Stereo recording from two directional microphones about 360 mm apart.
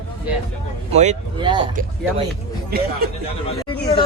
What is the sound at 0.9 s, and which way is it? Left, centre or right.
Speech, centre.